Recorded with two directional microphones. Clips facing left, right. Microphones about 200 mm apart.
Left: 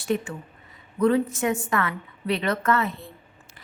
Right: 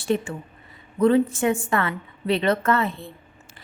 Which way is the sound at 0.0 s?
30° right (ahead or behind).